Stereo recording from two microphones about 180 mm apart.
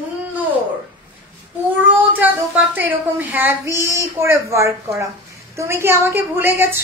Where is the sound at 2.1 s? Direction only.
10° right (ahead or behind).